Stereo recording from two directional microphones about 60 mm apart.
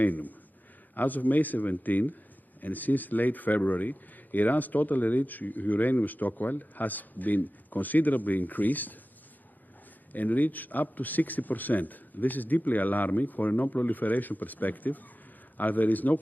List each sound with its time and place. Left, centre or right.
0.0 s a man's voice: left
10.1 s a man's voice: left